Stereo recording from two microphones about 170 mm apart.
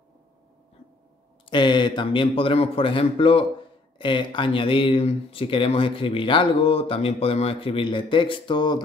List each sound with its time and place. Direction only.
1.5 s a man's voice: 25° left (ahead or behind)